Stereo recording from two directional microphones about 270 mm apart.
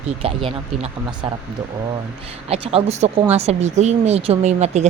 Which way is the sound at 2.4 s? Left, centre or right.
Right.